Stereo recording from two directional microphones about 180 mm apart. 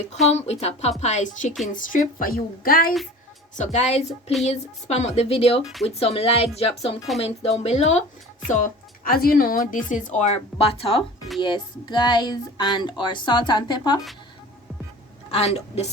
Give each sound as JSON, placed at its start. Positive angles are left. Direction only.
{"t": 0.3, "sound": "a woman's voice", "side_deg": 35}
{"t": 3.6, "sound": "speech", "side_deg": 40}
{"t": 15.5, "sound": "speech", "side_deg": 35}